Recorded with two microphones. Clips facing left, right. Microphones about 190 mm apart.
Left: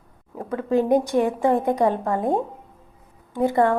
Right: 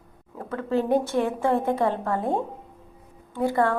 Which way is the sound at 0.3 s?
15° left (ahead or behind).